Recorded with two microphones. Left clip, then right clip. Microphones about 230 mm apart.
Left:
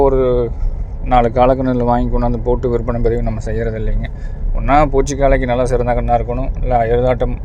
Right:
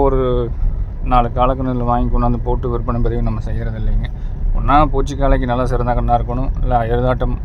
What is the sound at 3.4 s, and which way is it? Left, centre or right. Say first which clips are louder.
Speech: left 9 dB; centre.